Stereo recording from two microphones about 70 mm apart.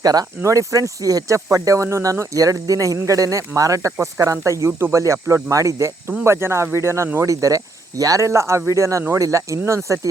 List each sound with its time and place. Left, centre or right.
0.0 s speech: right
0.4 s speech: right
6.2 s speech: right
7.3 s speech: right